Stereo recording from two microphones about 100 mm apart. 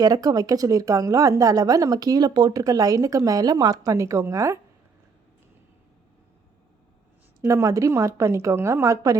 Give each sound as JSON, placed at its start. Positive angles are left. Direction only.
{"t": 0.0, "sound": "speech", "side_deg": -40}
{"t": 7.4, "sound": "speech", "side_deg": -30}